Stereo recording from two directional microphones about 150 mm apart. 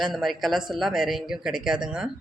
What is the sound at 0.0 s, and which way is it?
Speech, centre (ahead or behind).